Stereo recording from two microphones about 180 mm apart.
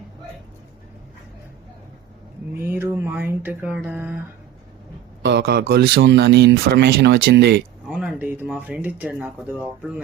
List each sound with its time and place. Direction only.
2.6 s a sound: 15° right (ahead or behind)
5.2 s speech: 65° right (ahead or behind)
7.9 s speech: 5° right (ahead or behind)